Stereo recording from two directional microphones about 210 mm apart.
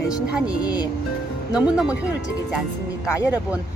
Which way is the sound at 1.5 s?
5° right (ahead or behind).